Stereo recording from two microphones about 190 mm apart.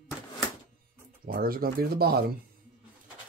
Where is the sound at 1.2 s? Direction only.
50° right (ahead or behind).